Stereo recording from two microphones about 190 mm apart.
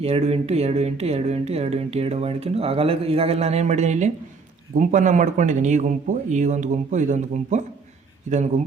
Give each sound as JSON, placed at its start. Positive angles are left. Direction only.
{"t": 0.0, "sound": "speech", "side_deg": -35}